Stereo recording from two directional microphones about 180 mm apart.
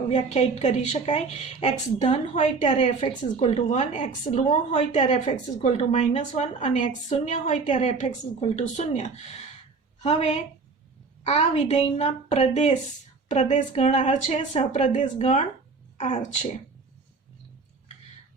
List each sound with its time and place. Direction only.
0.6 s a woman's voice: 40° left (ahead or behind)